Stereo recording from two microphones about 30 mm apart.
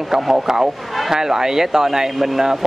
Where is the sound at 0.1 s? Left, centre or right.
Centre.